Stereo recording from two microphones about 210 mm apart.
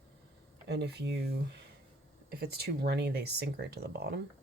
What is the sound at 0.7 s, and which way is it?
Speech, 55° right (ahead or behind).